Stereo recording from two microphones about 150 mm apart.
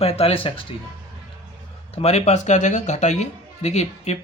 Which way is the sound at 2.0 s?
45° left (ahead or behind).